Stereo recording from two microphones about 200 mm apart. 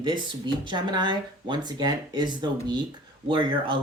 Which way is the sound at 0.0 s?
25° right (ahead or behind).